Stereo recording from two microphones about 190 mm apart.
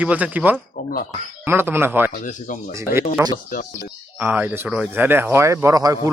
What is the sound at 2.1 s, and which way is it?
Speech, 45° left (ahead or behind).